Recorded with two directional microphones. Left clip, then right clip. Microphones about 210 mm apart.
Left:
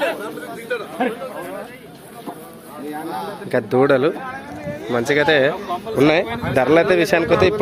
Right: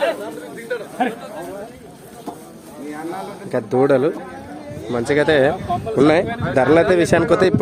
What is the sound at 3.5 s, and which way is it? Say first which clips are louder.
A man's voice: even; 5° right (ahead or behind).